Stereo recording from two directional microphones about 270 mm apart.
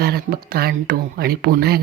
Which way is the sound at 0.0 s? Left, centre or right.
Right.